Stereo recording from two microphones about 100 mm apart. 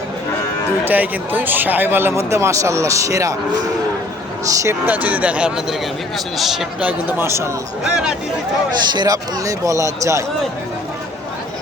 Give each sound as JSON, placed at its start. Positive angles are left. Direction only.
{"t": 0.9, "sound": "speech", "side_deg": -20}
{"t": 4.4, "sound": "speech", "side_deg": -30}
{"t": 4.9, "sound": "a man's voice", "side_deg": -15}
{"t": 6.8, "sound": "speech", "side_deg": -20}
{"t": 7.9, "sound": "speech", "side_deg": -5}
{"t": 8.9, "sound": "speech", "side_deg": -40}